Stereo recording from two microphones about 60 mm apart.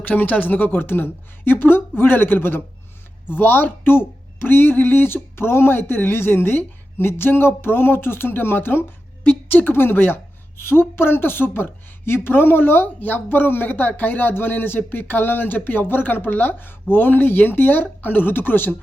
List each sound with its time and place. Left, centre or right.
0.0 s a woman's voice: left